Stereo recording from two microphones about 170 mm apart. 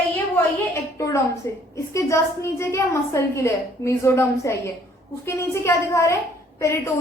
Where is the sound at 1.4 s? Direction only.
15° left (ahead or behind).